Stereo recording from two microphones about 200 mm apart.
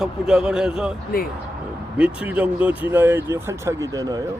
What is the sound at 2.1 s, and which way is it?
Speech, 5° right (ahead or behind).